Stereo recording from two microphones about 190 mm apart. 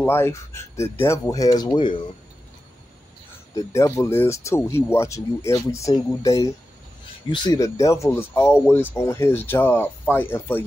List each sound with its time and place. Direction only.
0.0 s speech: 10° left (ahead or behind)
3.5 s speech: 15° left (ahead or behind)